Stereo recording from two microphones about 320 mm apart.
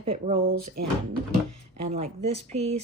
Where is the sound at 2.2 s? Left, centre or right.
Centre.